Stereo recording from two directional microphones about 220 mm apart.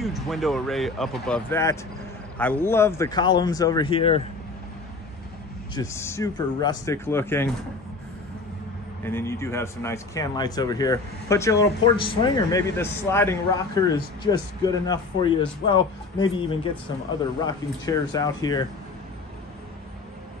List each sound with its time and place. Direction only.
0.0 s a man's voice: centre (ahead or behind); by 4.2 s 25° left (ahead or behind)
5.8 s a man's voice: 10° left (ahead or behind)
9.0 s a man's voice: 10° left (ahead or behind)
17.5 s a man's voice: 15° left (ahead or behind)